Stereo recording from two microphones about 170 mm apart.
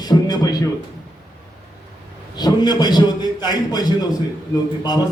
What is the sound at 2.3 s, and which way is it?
A man's voice, 25° left (ahead or behind).